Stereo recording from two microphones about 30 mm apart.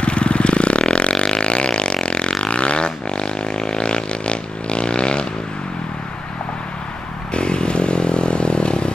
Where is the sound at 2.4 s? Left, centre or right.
Left.